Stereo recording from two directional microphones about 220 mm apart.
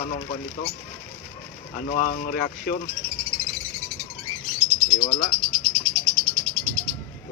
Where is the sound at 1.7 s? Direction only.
35° left (ahead or behind).